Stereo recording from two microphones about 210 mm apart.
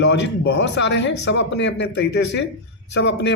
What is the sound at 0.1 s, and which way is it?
A woman's voice, 55° left (ahead or behind).